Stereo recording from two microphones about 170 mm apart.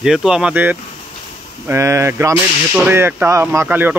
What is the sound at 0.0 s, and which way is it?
Speech, 5° right (ahead or behind).